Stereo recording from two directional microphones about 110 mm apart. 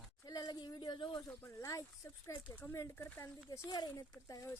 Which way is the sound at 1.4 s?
30° left (ahead or behind).